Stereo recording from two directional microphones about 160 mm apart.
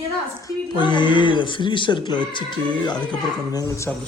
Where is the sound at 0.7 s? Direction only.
30° left (ahead or behind).